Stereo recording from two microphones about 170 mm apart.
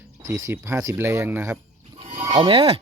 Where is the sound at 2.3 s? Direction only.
30° right (ahead or behind).